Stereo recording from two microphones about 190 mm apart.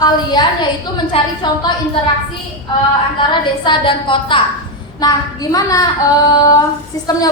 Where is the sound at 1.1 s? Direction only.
30° left (ahead or behind).